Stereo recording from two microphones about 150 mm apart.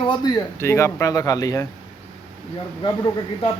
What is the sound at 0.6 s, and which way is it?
A man's voice, 15° left (ahead or behind).